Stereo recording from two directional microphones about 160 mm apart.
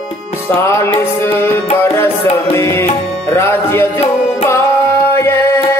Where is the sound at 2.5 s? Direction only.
15° left (ahead or behind).